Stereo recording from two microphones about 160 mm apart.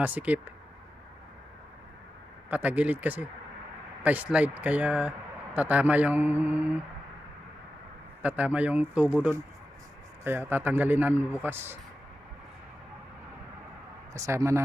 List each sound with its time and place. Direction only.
0.0 s a man's voice: 10° right (ahead or behind)
2.5 s a man's voice: 10° right (ahead or behind)
8.2 s a man's voice: 10° right (ahead or behind)
14.1 s a man's voice: 20° right (ahead or behind)